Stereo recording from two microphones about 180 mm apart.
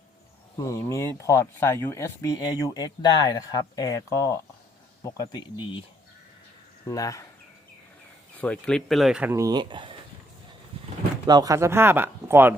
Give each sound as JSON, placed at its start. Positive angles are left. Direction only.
{"t": 0.6, "sound": "speech", "side_deg": 20}
{"t": 6.8, "sound": "speech", "side_deg": 20}
{"t": 8.4, "sound": "speech", "side_deg": 5}
{"t": 9.3, "sound": "speech", "side_deg": -20}
{"t": 11.3, "sound": "speech", "side_deg": -20}